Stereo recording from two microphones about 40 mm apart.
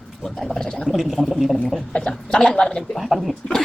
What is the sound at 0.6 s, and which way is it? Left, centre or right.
Speech, centre.